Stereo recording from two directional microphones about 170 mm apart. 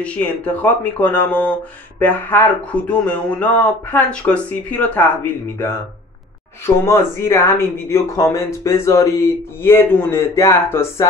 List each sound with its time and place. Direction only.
0.0 s speech: 10° left (ahead or behind)